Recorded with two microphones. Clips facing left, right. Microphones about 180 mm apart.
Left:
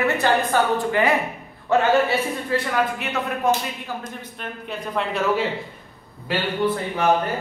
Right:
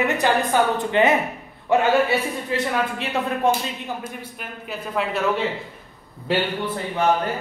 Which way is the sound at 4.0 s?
5° right (ahead or behind).